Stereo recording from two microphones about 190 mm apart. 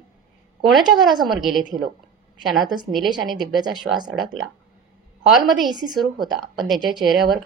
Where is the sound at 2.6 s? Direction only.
20° right (ahead or behind).